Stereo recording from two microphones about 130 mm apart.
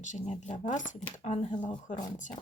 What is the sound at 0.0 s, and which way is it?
Speech, 65° left (ahead or behind).